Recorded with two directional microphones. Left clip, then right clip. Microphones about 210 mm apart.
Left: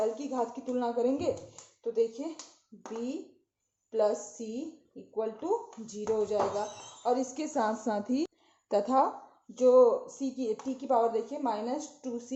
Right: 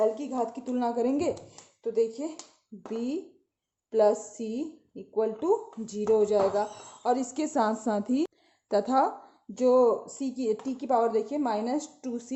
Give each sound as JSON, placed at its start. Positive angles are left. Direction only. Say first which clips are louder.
{"t": 0.0, "sound": "speech", "louder": "right 4 dB", "side_deg": -45}
{"t": 3.9, "sound": "a woman's voice", "louder": "right 5 dB", "side_deg": -50}
{"t": 9.6, "sound": "speech", "louder": "even", "side_deg": -50}